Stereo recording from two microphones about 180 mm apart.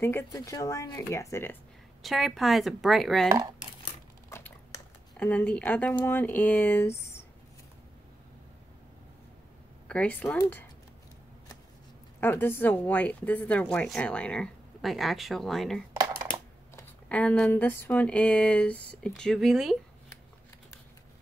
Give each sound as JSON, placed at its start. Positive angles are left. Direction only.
{"t": 0.0, "sound": "a woman's voice", "side_deg": 15}
{"t": 2.0, "sound": "speech", "side_deg": 0}
{"t": 3.3, "sound": "speech", "side_deg": -20}
{"t": 4.3, "sound": "a sound", "side_deg": 10}
{"t": 5.1, "sound": "a woman's voice", "side_deg": 5}
{"t": 9.8, "sound": "a woman's voice", "side_deg": 10}
{"t": 12.2, "sound": "a woman's voice", "side_deg": 10}